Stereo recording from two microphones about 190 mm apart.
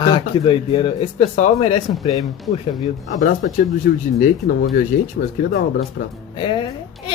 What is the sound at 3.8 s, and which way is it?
Speech, 50° left (ahead or behind).